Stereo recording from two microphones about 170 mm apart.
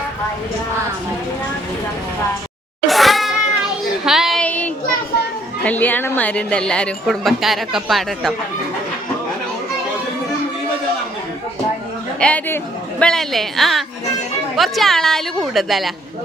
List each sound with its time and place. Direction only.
2.8 s a sound: centre (ahead or behind)
5.6 s a woman's voice: 10° left (ahead or behind)
12.2 s a man's voice: 10° left (ahead or behind)